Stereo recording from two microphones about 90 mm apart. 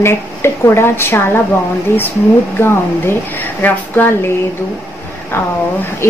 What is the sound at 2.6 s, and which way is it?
A woman's voice, 25° left (ahead or behind).